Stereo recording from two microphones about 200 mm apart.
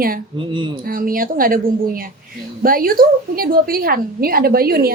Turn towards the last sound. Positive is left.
turn(degrees=-50)  # may be behind; listen again after turning